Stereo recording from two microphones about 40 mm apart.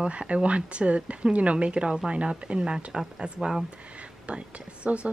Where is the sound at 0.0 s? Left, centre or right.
Right.